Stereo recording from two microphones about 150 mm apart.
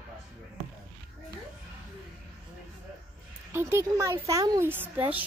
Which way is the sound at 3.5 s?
15° right (ahead or behind).